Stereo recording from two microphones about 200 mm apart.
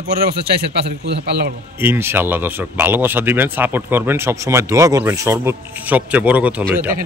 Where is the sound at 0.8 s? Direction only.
55° right (ahead or behind).